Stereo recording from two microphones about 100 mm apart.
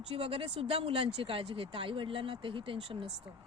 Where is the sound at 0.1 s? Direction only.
70° right (ahead or behind).